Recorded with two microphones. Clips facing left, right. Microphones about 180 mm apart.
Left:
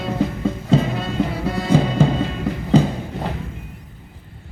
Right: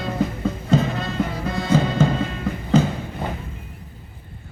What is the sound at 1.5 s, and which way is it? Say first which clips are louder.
Music: left 2 dB; 30° left (ahead or behind).